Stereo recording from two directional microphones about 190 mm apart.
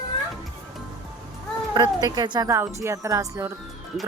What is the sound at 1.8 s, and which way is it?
A woman's voice, 20° right (ahead or behind).